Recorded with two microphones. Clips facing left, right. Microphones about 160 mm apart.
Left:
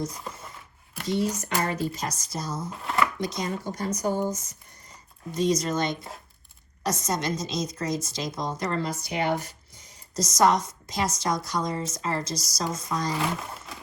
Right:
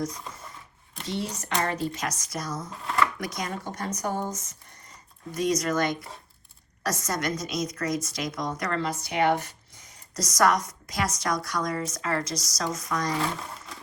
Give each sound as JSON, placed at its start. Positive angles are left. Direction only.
{"t": 1.0, "sound": "speech", "side_deg": 40}
{"t": 2.6, "sound": "chopping", "side_deg": 0}
{"t": 3.2, "sound": "a woman's voice", "side_deg": 25}
{"t": 10.2, "sound": "a woman's voice", "side_deg": 25}